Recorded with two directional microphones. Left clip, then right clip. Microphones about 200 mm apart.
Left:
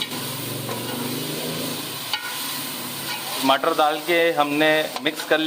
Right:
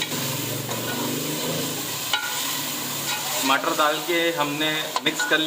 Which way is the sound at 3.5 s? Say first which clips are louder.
Left 3 dB; 55° left (ahead or behind).